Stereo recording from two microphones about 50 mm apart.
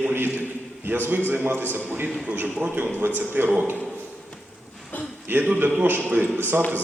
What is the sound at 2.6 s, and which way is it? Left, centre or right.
Speech, right.